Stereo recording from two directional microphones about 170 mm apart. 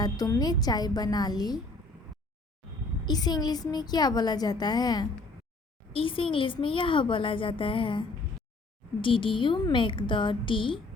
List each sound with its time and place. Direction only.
0.0 s a woman's voice: 20° left (ahead or behind)
3.1 s a woman's voice: 25° left (ahead or behind)